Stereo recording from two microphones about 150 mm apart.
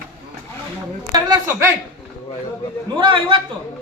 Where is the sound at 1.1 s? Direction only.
25° right (ahead or behind).